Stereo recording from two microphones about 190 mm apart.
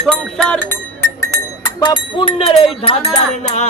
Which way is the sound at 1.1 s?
15° left (ahead or behind).